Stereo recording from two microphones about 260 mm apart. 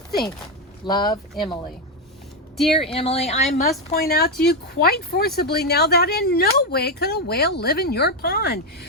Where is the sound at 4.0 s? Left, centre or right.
Left.